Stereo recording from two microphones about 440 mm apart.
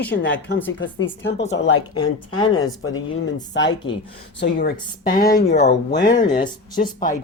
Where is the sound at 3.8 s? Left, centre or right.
Left.